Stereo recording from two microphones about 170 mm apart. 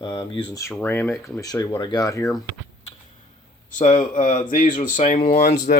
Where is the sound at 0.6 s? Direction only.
15° left (ahead or behind).